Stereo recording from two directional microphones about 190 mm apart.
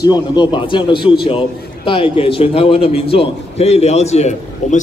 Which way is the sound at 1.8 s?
30° left (ahead or behind).